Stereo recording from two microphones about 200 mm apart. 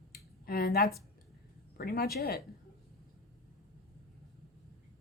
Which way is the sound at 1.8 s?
50° left (ahead or behind).